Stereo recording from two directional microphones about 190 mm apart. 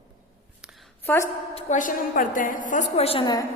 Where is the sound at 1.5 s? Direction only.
40° left (ahead or behind).